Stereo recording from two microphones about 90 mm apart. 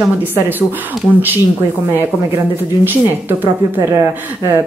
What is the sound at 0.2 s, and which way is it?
Speech, 20° right (ahead or behind).